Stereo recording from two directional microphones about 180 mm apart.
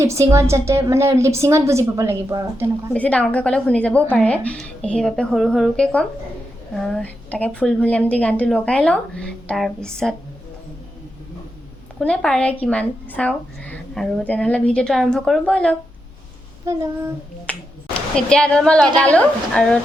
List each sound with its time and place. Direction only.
0.0 s a woman's voice: 15° right (ahead or behind)
2.9 s a woman's voice: 5° left (ahead or behind)
11.9 s speech: 5° left (ahead or behind)
16.7 s a woman's voice: 15° right (ahead or behind)
17.5 s a woman's voice: 5° left (ahead or behind)